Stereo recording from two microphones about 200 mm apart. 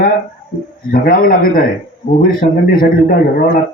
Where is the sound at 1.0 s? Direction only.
45° left (ahead or behind).